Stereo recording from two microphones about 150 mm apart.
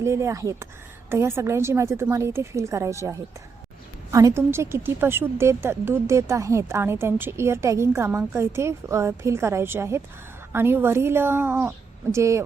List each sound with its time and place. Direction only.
0.0 s a woman's voice: 20° right (ahead or behind)